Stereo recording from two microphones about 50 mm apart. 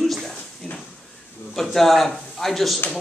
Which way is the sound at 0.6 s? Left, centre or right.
Centre.